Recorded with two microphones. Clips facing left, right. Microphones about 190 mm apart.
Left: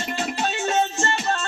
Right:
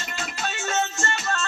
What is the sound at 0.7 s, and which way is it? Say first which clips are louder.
Music: left 3 dB; 25° left (ahead or behind).